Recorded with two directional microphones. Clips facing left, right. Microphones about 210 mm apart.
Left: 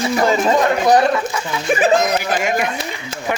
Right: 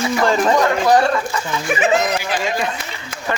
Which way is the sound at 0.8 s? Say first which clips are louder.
Left 1 dB; 20° left (ahead or behind).